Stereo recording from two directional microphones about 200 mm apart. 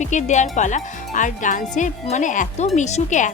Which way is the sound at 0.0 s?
35° left (ahead or behind).